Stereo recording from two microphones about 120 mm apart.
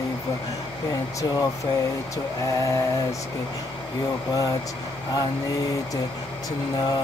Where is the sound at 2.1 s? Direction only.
30° left (ahead or behind).